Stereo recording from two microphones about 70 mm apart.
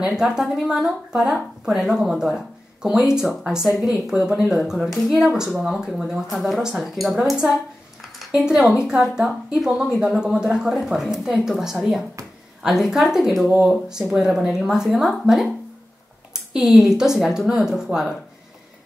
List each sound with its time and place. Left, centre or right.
0.0 s speech: centre
5.2 s speech: centre
8.3 s speech: centre
13.5 s speech: centre